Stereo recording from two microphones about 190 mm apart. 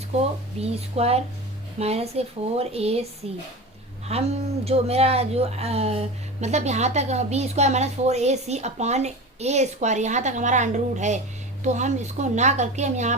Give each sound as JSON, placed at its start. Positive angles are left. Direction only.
{"t": 0.2, "sound": "speech", "side_deg": -35}